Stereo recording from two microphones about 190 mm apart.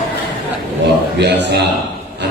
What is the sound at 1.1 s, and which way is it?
Speech, 60° right (ahead or behind).